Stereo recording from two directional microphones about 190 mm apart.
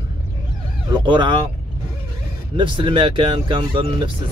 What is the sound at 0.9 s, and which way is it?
Speech, 25° right (ahead or behind).